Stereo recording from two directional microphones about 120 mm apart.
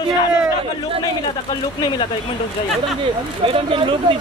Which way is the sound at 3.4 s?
45° right (ahead or behind).